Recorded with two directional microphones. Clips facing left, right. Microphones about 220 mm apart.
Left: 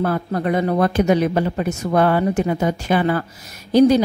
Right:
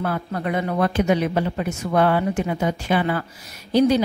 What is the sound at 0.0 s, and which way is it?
A woman's voice, 40° left (ahead or behind).